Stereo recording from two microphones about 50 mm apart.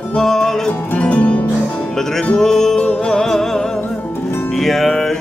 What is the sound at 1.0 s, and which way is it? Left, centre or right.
Music, left.